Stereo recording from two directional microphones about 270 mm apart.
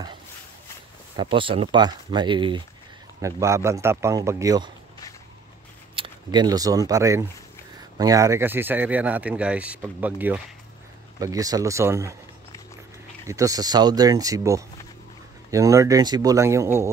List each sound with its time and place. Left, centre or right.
1.1 s speech: centre
5.9 s speech: centre
13.3 s speech: centre